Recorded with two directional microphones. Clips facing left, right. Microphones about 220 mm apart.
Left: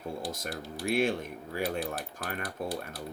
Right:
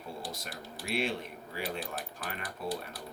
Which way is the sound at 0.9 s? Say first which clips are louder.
Left 4 dB; 50° left (ahead or behind).